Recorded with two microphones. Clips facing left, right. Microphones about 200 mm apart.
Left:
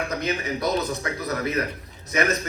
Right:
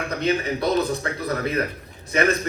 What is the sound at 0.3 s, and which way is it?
Speech, 30° right (ahead or behind).